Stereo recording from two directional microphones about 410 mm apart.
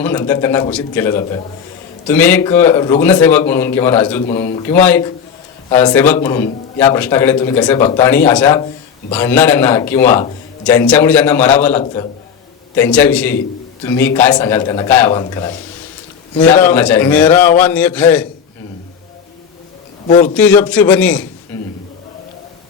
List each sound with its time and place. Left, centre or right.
0.0 s a man's voice: centre
20.1 s a man's voice: centre
20.3 s a man's voice: centre